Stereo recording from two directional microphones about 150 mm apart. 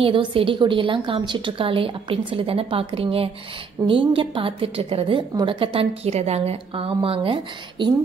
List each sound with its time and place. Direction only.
0.0 s a woman's voice: 35° right (ahead or behind)